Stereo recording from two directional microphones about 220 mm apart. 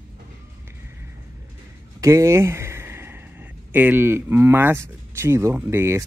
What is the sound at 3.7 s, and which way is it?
Speech, 10° right (ahead or behind).